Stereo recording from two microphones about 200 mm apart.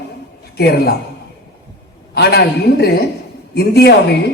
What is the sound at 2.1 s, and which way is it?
A woman's voice, 55° left (ahead or behind).